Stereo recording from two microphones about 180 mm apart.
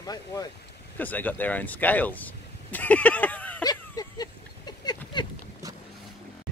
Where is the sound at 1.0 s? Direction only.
10° left (ahead or behind).